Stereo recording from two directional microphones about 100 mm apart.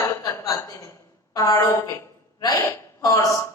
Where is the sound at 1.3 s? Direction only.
40° left (ahead or behind).